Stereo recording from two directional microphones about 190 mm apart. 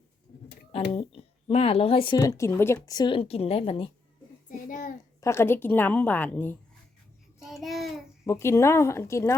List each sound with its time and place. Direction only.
0.9 s speech: 30° left (ahead or behind)
2.1 s speech: 15° left (ahead or behind)
4.4 s child singing: 45° left (ahead or behind)
5.2 s a woman's voice: 15° left (ahead or behind)
7.3 s child singing: centre (ahead or behind)
8.3 s a woman's voice: 15° left (ahead or behind)